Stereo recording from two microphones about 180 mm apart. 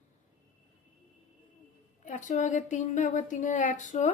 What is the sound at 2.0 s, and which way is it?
Speech, 45° left (ahead or behind).